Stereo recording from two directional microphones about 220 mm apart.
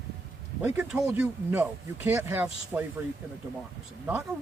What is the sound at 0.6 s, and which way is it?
Speech, 10° right (ahead or behind).